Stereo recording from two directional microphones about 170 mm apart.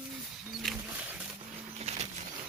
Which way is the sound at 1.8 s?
40° right (ahead or behind).